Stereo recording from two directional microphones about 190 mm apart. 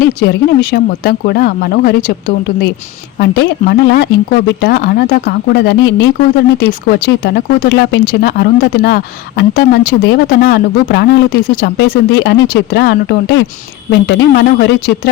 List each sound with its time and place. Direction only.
0.0 s speech: 50° left (ahead or behind); by 13.5 s 70° left (ahead or behind)
13.9 s speech: 55° left (ahead or behind)